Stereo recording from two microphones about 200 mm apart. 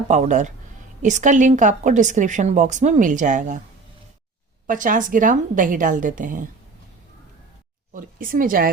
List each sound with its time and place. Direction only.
0.1 s speech: 35° right (ahead or behind)
4.6 s speech: 40° right (ahead or behind)
7.9 s speech: 45° right (ahead or behind)